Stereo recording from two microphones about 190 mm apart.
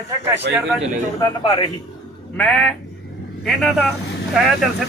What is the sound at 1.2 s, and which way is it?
Speech, 25° left (ahead or behind).